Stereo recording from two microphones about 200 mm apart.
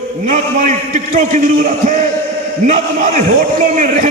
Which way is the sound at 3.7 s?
40° right (ahead or behind).